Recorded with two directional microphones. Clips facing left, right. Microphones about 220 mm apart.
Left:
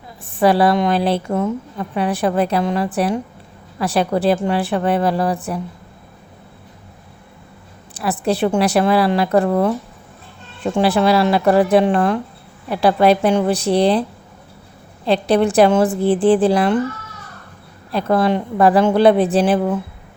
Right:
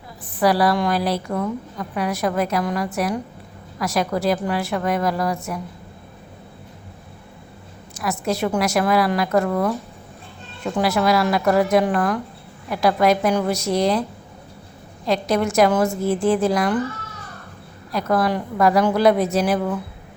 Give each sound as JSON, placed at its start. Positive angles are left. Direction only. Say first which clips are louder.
{"t": 0.3, "sound": "a woman's voice", "louder": "left 4 dB", "side_deg": 25}
{"t": 7.9, "sound": "a woman's voice", "louder": "left 4 dB", "side_deg": 35}
{"t": 15.0, "sound": "a woman's voice", "louder": "left 5 dB", "side_deg": 30}
{"t": 17.9, "sound": "a woman's voice", "louder": "left 4 dB", "side_deg": 25}